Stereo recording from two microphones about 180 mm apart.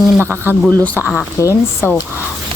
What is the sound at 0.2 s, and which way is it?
Speech, 15° right (ahead or behind).